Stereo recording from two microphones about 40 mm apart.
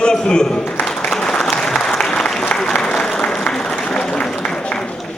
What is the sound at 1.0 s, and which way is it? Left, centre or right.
Applause, centre.